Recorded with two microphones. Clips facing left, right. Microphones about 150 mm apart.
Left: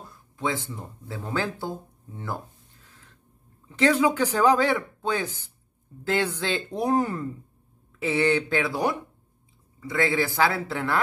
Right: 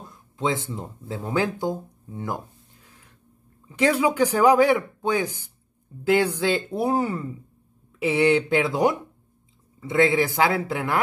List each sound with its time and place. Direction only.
0.1 s speech: 20° right (ahead or behind); by 7.2 s 5° right (ahead or behind)
8.0 s speech: 15° right (ahead or behind)